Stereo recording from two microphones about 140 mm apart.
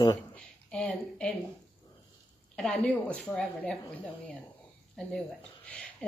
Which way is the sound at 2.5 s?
5° left (ahead or behind).